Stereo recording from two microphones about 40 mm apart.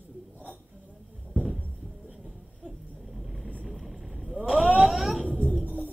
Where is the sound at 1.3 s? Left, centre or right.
Centre.